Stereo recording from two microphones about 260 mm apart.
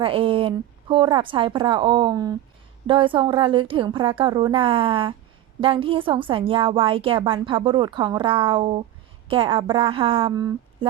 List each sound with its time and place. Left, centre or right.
0.0 s a woman's voice: centre